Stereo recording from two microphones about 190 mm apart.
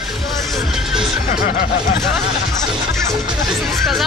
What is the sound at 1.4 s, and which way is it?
Snicker, 55° left (ahead or behind).